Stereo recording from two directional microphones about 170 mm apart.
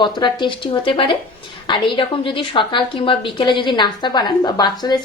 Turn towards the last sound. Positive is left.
turn(degrees=25)  # may be behind; listen again after turning